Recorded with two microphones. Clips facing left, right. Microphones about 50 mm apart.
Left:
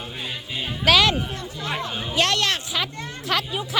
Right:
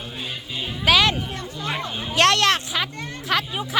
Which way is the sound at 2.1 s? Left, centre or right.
Right.